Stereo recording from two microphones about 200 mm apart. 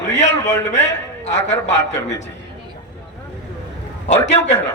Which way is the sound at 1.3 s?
65° left (ahead or behind).